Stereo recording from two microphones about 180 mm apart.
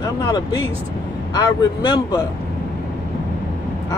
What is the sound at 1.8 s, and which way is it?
Speech, 25° left (ahead or behind).